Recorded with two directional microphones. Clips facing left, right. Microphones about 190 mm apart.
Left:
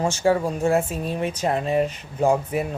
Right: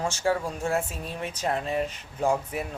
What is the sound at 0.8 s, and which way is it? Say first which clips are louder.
Speech: left 7 dB; 55° left (ahead or behind).